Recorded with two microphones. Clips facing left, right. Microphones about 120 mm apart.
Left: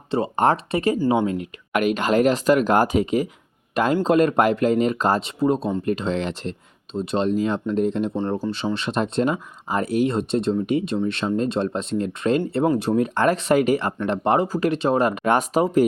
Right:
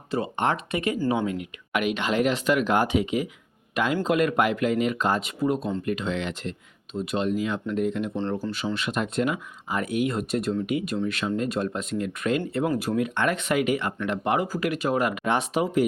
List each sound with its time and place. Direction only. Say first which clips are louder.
0.1 s speech: left 6 dB; 35° left (ahead or behind)
0.9 s speech: left 4 dB; 20° left (ahead or behind)
1.2 s speech: left 4 dB; 35° left (ahead or behind)
13.0 s speech: left 5 dB; 35° left (ahead or behind)
15.2 s speech: left 5 dB; 45° left (ahead or behind)